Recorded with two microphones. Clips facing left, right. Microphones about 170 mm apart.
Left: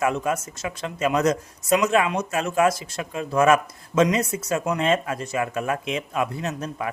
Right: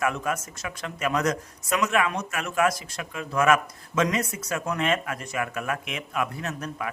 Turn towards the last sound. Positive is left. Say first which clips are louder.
# left 4 dB
turn(degrees=30)  # may be behind; listen again after turning